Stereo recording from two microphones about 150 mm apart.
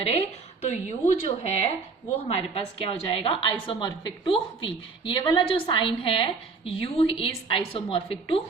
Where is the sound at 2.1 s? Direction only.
40° left (ahead or behind).